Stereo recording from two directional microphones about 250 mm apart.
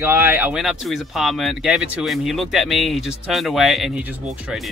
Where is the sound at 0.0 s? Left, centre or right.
Centre.